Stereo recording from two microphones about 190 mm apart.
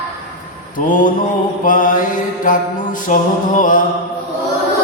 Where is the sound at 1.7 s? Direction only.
45° left (ahead or behind).